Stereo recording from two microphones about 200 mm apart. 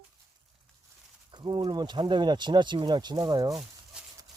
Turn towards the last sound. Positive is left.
turn(degrees=-20)  # may be behind; listen again after turning